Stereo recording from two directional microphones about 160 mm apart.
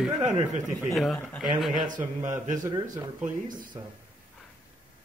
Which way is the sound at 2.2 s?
50° right (ahead or behind).